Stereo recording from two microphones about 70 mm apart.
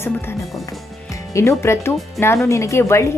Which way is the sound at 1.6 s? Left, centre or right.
Left.